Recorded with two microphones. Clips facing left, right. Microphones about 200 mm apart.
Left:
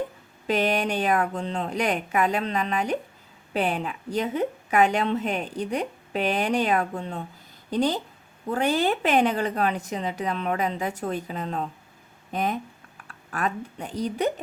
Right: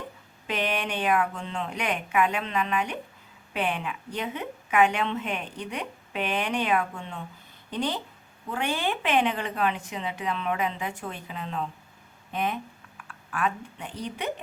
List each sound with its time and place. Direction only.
0.4 s speech: 40° left (ahead or behind)